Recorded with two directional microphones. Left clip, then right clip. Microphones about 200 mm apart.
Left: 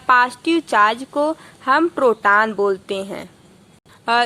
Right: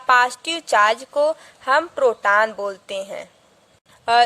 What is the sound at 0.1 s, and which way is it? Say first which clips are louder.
Speech: left 2 dB; 25° right (ahead or behind).